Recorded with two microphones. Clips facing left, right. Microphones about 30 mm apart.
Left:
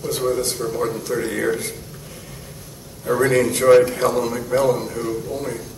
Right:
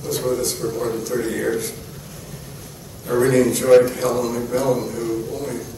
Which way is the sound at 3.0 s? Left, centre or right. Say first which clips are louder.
Right 1 dB; centre.